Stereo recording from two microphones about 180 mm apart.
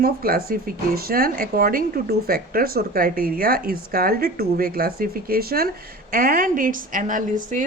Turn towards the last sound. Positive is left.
turn(degrees=-45)  # may be behind; listen again after turning